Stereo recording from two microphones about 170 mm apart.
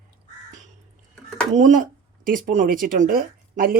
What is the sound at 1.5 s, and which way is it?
Speech, 45° right (ahead or behind).